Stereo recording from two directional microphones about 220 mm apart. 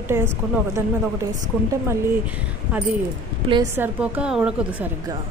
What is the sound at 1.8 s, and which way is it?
Speech, 5° right (ahead or behind).